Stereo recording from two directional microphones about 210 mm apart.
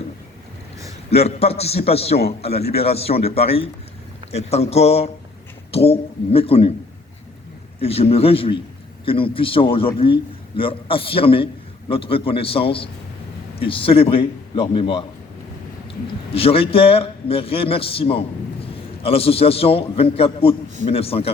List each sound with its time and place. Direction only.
1.1 s a man's voice: 30° left (ahead or behind)
7.8 s a man's voice: 25° left (ahead or behind)
16.3 s a man's voice: 25° left (ahead or behind)